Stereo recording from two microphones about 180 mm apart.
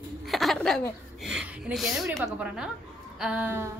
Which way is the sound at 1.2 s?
5° right (ahead or behind).